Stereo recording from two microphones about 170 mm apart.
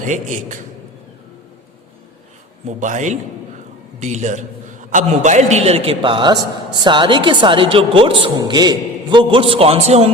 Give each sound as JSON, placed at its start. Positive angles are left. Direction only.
{"t": 0.1, "sound": "a man's voice", "side_deg": -50}
{"t": 2.6, "sound": "a man's voice", "side_deg": -45}